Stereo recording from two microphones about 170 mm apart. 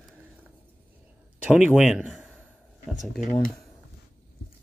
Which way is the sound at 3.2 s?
55° left (ahead or behind).